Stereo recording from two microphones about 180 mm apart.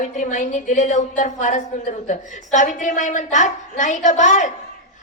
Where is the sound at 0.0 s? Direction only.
40° left (ahead or behind).